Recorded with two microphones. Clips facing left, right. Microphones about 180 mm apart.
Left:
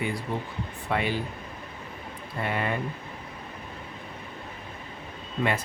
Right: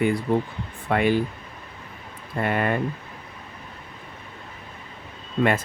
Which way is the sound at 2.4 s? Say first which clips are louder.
Right 5 dB; 55° right (ahead or behind).